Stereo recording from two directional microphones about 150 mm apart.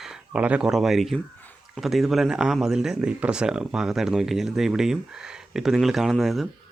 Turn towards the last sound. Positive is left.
turn(degrees=0)  # may be behind; listen again after turning